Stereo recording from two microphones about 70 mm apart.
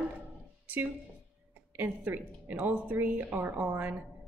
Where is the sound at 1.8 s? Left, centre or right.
Right.